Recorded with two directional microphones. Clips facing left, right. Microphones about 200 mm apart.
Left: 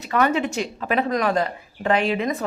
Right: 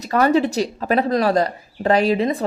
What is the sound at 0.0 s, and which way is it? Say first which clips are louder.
Speech: right 4 dB; 35° right (ahead or behind).